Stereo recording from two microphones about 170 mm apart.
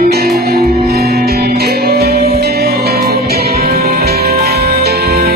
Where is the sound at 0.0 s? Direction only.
65° right (ahead or behind).